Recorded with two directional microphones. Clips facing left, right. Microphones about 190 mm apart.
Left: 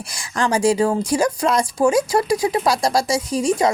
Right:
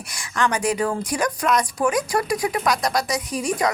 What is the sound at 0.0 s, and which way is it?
Speech, 30° left (ahead or behind).